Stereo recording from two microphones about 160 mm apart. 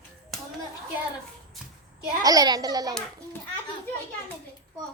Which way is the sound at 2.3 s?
25° right (ahead or behind).